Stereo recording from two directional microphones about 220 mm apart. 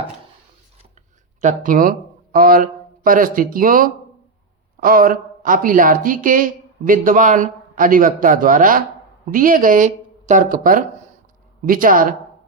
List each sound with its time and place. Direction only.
1.4 s speech: 35° right (ahead or behind)